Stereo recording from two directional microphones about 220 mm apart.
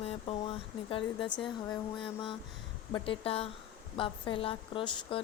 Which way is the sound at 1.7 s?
20° left (ahead or behind).